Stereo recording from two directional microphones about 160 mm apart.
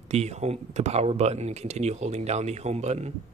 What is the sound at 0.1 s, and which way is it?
Speech, 45° right (ahead or behind).